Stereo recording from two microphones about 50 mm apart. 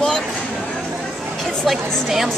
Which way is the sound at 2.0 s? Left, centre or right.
Centre.